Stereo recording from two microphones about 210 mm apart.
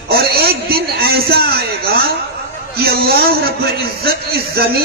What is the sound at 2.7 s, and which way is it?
A man's voice, 45° right (ahead or behind).